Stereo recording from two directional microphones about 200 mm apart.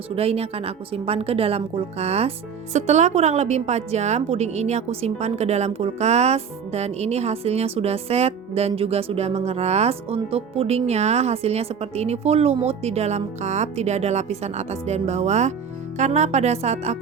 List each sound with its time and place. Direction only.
0.2 s a woman's voice: 30° right (ahead or behind)